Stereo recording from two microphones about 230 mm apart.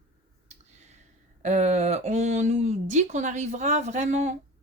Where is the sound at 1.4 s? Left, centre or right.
Right.